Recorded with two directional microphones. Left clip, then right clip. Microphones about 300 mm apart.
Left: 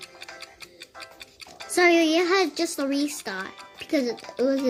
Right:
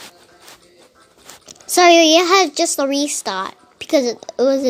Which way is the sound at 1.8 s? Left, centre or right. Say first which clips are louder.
Right 9 dB; centre.